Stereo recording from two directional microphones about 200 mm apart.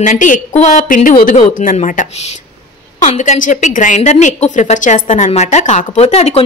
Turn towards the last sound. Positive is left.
turn(degrees=30)  # may be behind; listen again after turning